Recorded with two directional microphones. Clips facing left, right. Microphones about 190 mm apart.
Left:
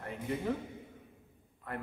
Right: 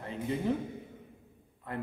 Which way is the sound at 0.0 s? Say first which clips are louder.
Right 3 dB; 20° right (ahead or behind).